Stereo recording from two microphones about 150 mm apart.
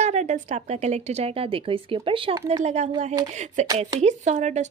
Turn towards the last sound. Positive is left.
turn(degrees=-50)  # may be behind; listen again after turning